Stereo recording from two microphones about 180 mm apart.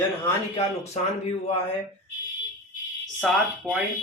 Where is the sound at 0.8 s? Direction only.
35° left (ahead or behind).